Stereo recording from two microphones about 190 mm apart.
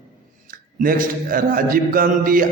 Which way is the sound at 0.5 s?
45° right (ahead or behind).